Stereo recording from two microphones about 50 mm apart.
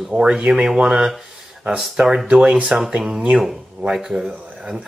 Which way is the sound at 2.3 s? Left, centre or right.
Right.